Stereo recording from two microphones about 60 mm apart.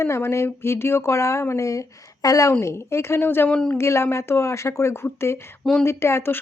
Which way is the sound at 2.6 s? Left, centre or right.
Left.